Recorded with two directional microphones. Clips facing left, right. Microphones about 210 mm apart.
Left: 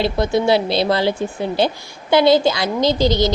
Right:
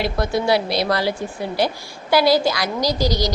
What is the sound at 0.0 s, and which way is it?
A woman's voice, 25° left (ahead or behind).